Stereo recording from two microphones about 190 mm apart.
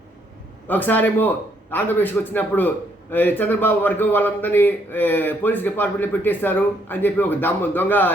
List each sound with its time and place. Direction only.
0.7 s a man's voice: 10° left (ahead or behind)